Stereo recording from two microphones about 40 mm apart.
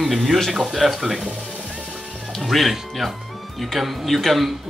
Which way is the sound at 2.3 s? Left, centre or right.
Centre.